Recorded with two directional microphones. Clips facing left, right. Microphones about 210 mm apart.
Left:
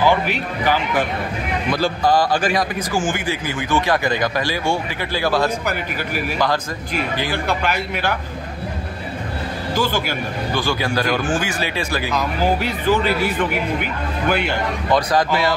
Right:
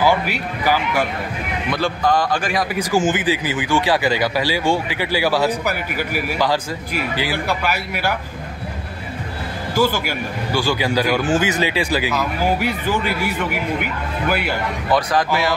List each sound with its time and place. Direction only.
0.0 s speech: 10° right (ahead or behind)
1.8 s speech: 35° left (ahead or behind)
2.5 s speech: 10° right (ahead or behind)
9.8 s speech: 10° right (ahead or behind)
14.3 s a man's voice: 5° right (ahead or behind)